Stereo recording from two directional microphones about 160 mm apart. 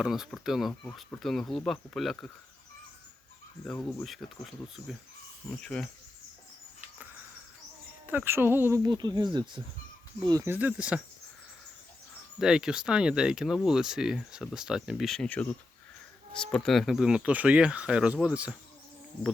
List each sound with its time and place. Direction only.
0.0 s speech: 5° right (ahead or behind)
3.7 s speech: 10° left (ahead or behind)
4.0 s speech: centre (ahead or behind)
8.0 s speech: 10° right (ahead or behind)
10.5 s speech: 10° right (ahead or behind)
12.4 s speech: 5° right (ahead or behind)